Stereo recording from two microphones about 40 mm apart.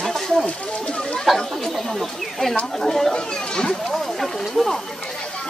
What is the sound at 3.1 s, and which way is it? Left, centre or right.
Speech, centre.